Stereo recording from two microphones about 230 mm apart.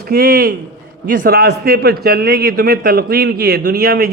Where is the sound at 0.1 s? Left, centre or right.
Right.